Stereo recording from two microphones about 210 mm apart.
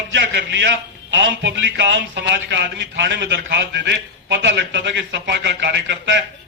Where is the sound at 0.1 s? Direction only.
60° right (ahead or behind).